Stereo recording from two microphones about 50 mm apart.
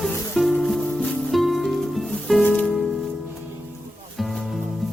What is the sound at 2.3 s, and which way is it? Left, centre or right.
Music, centre.